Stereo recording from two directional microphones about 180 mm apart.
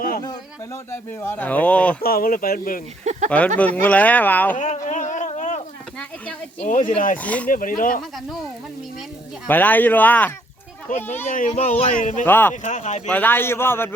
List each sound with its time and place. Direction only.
0.2 s speech: 20° left (ahead or behind)
2.0 s speech: 55° left (ahead or behind)
3.0 s speech: 40° right (ahead or behind)
3.2 s speech: 10° left (ahead or behind)
4.5 s a sound: 40° left (ahead or behind)
6.6 s speech: 45° left (ahead or behind)
7.2 s speech: 10° left (ahead or behind)
7.4 s speech: 50° left (ahead or behind)
9.5 s speech: 10° left (ahead or behind)
11.3 s speech: 45° left (ahead or behind)
12.2 s speech: 10° left (ahead or behind)
12.6 s speech: 40° left (ahead or behind)
13.1 s speech: 10° left (ahead or behind)